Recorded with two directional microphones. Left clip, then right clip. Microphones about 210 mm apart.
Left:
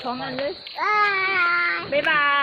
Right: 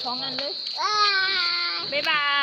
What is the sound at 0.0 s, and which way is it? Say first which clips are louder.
A child's voice: left 1 dB; 35° left (ahead or behind).